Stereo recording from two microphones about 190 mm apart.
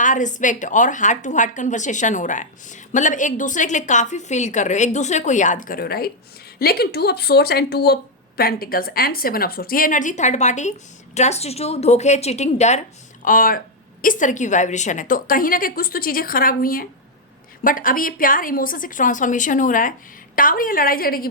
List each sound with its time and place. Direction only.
0.0 s a woman's voice: 40° left (ahead or behind)
13.2 s a woman's voice: 45° left (ahead or behind)